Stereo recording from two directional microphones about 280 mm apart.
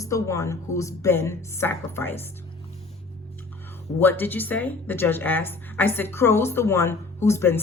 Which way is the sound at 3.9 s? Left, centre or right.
Centre.